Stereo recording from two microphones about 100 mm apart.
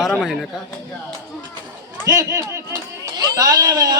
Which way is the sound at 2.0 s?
35° right (ahead or behind).